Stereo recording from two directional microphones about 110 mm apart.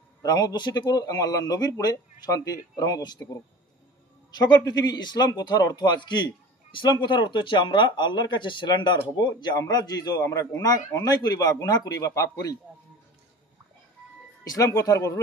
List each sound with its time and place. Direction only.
0.2 s a man's voice: 35° left (ahead or behind)
4.6 s a man's voice: 35° left (ahead or behind)
14.5 s speech: 30° left (ahead or behind)